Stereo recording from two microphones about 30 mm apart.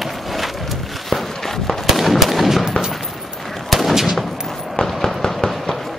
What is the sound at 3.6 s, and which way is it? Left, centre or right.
Gunshot, centre.